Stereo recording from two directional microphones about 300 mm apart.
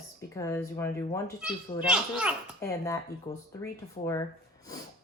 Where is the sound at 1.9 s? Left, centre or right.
Centre.